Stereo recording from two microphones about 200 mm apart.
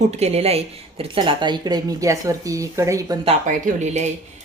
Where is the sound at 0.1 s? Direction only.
35° right (ahead or behind); by 3.2 s 15° right (ahead or behind).